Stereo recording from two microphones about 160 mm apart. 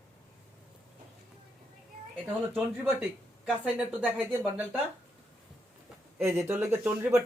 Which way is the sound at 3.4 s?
10° right (ahead or behind).